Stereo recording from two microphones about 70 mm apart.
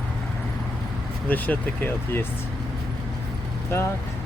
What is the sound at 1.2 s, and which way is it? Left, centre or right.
Speech, left.